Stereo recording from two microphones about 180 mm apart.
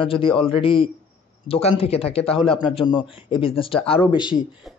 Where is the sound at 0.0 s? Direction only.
30° left (ahead or behind).